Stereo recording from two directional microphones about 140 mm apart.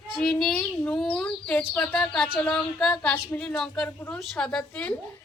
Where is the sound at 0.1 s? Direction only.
5° left (ahead or behind).